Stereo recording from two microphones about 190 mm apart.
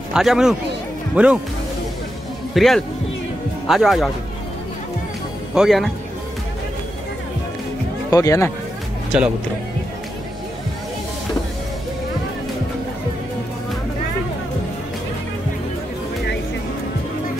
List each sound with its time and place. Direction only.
0.1 s speech: 5° right (ahead or behind)
2.5 s speech: centre (ahead or behind)
5.5 s speech: centre (ahead or behind)
8.1 s speech: 15° left (ahead or behind)
9.1 s speech: 5° right (ahead or behind)